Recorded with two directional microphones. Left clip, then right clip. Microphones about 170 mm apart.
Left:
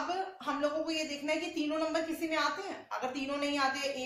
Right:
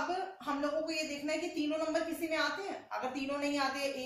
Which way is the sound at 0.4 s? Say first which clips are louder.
Left 2 dB; 30° left (ahead or behind).